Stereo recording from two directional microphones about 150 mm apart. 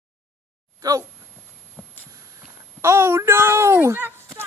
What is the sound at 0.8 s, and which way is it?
Speech, 25° right (ahead or behind).